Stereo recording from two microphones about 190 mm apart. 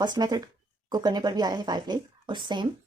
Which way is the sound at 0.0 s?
20° right (ahead or behind).